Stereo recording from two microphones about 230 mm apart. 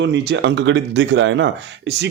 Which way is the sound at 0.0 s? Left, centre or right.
Right.